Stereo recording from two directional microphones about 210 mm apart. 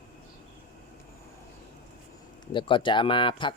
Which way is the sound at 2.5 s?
25° left (ahead or behind).